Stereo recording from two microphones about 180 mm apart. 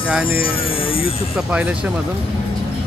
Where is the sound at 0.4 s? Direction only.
30° left (ahead or behind).